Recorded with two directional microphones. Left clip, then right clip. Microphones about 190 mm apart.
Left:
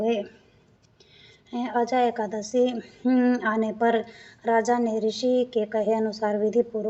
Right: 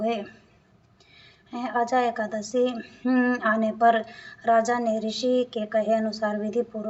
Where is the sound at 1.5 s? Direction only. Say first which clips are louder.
Even; 50° left (ahead or behind).